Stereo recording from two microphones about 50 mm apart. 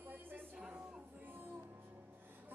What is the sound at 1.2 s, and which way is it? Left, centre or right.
Music, right.